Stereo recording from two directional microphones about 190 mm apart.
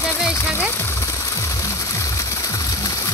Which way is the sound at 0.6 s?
10° left (ahead or behind).